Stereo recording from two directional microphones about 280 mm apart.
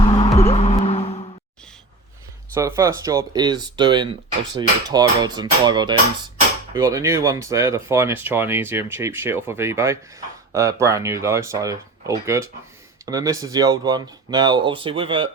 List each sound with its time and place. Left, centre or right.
0.0 s music: centre
2.6 s speech: centre